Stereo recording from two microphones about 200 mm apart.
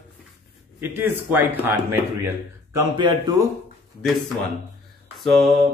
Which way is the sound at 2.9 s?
25° right (ahead or behind).